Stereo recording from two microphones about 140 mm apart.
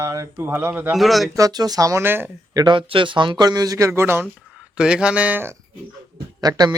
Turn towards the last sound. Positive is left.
turn(degrees=-30)  # may be behind; listen again after turning